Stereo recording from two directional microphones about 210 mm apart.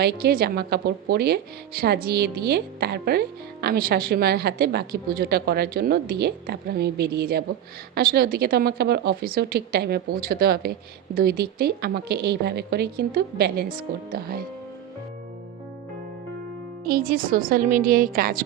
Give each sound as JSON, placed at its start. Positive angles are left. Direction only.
{"t": 0.0, "sound": "speech", "side_deg": -45}
{"t": 16.8, "sound": "a woman's voice", "side_deg": -45}